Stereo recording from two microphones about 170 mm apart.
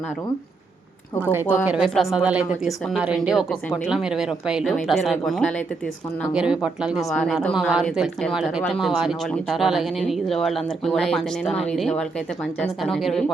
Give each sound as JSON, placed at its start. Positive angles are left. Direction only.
{"t": 1.3, "sound": "a woman's voice", "side_deg": -10}